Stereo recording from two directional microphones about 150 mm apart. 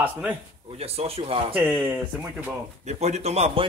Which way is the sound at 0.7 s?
40° right (ahead or behind).